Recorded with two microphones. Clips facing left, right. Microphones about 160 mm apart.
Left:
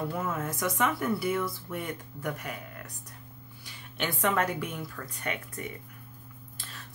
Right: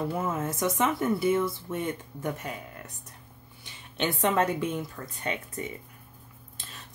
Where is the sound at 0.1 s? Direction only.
25° right (ahead or behind).